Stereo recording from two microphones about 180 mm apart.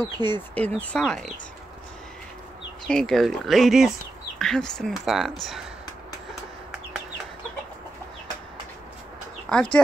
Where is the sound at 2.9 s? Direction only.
5° left (ahead or behind).